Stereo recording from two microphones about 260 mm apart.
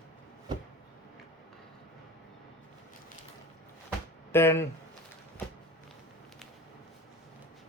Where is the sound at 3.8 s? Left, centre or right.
Centre.